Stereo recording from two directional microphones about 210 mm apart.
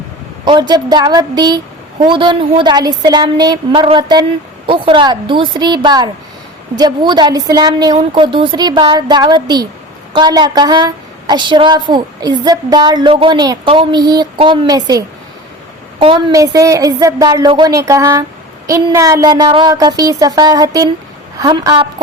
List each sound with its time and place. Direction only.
0.4 s a woman's voice: 20° right (ahead or behind)